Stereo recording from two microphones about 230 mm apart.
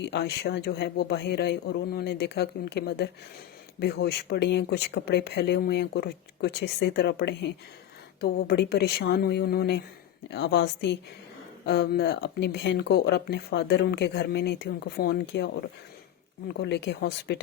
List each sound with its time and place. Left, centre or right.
0.0 s speech: left